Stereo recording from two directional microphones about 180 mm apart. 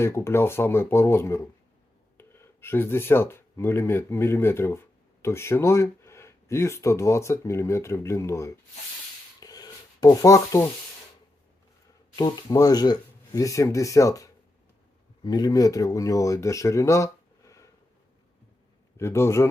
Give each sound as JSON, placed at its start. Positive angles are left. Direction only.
{"t": 0.0, "sound": "speech", "side_deg": 15}
{"t": 9.4, "sound": "rub", "side_deg": 20}
{"t": 12.1, "sound": "speech", "side_deg": 20}
{"t": 18.9, "sound": "speech", "side_deg": 15}